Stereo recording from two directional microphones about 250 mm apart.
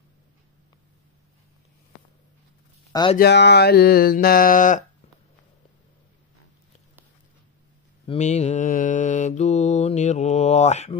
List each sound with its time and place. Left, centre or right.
2.9 s speech: centre
3.2 s a sound: left
8.1 s mantra: left